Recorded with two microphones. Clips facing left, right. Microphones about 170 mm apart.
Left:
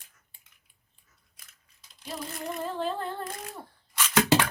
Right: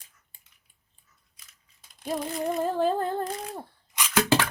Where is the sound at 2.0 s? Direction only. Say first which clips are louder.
Right 8 dB; 50° right (ahead or behind).